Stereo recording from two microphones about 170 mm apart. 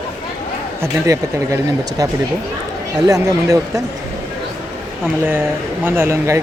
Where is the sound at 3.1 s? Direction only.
20° right (ahead or behind).